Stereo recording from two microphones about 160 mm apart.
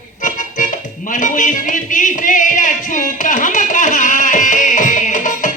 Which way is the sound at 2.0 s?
55° left (ahead or behind).